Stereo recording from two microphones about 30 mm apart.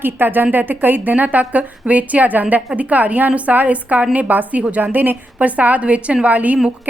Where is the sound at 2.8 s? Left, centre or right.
Right.